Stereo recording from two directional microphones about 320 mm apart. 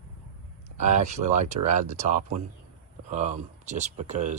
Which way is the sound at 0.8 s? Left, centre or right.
Right.